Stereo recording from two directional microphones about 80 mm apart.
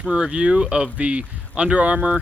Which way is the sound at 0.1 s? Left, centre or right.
Centre.